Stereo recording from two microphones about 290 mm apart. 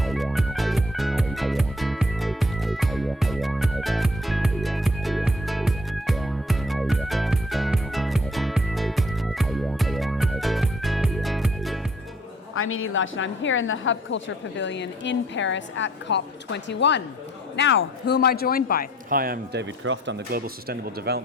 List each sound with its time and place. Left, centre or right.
0.0 s music: centre
12.5 s a woman's voice: left
19.1 s speech: right